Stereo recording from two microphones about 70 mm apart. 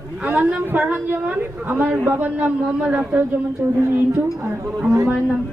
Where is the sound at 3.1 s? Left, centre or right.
Right.